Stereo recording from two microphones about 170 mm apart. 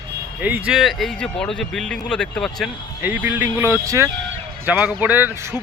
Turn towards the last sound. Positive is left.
turn(degrees=-10)  # may be behind; listen again after turning